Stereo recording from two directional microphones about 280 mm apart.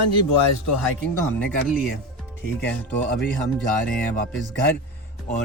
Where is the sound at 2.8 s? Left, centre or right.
Centre.